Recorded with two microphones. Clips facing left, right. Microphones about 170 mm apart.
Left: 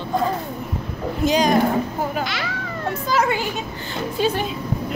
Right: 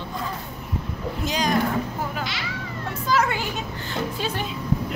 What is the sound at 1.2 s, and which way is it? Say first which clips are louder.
Speech: left 8 dB; 15° left (ahead or behind).